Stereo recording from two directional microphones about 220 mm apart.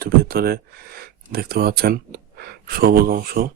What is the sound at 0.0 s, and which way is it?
Speech, 45° right (ahead or behind).